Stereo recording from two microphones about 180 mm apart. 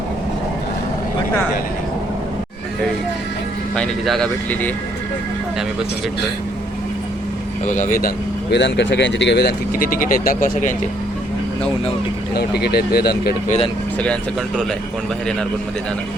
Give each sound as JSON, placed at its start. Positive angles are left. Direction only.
{"t": 3.8, "sound": "speech", "side_deg": 0}
{"t": 7.7, "sound": "speech", "side_deg": 45}
{"t": 12.3, "sound": "speech", "side_deg": 60}
{"t": 14.0, "sound": "speech", "side_deg": 5}